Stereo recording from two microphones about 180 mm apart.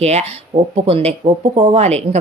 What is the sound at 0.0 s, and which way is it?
Speech, 35° right (ahead or behind).